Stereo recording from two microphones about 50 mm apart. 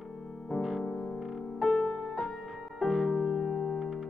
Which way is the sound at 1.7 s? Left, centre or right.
Centre.